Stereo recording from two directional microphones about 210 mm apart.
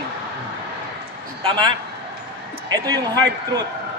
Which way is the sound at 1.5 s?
20° right (ahead or behind).